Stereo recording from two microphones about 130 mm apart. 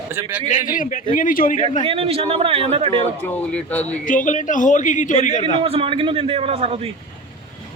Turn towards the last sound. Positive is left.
turn(degrees=-50)  # may be behind; listen again after turning